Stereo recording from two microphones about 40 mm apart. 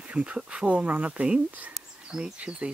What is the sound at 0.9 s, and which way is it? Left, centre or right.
Speech, right.